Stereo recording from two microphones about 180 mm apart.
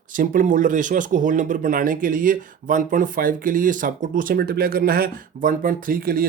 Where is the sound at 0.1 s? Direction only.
50° right (ahead or behind).